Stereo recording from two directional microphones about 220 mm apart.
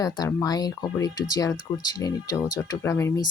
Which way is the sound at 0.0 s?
15° left (ahead or behind).